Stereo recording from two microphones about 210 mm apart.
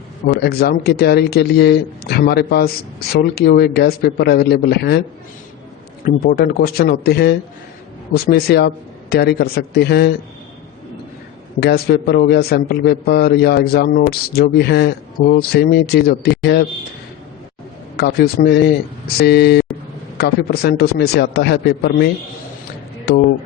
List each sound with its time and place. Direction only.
0.3 s a man's voice: 50° left (ahead or behind)
6.1 s a man's voice: 50° left (ahead or behind)
11.6 s a man's voice: 50° left (ahead or behind)
17.9 s a man's voice: 50° left (ahead or behind)